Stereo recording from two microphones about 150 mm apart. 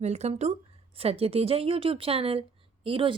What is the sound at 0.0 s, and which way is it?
Speech, 45° right (ahead or behind).